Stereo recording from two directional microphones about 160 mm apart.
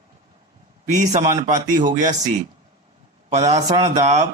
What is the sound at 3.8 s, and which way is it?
Speech, 45° right (ahead or behind).